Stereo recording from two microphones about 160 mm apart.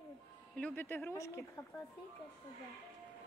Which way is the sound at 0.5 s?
10° left (ahead or behind).